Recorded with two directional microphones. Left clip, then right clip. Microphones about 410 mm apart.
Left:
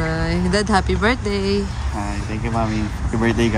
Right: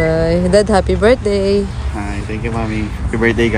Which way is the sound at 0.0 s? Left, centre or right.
Centre.